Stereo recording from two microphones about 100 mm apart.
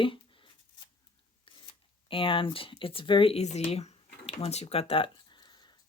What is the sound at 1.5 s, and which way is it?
Speech, 60° left (ahead or behind).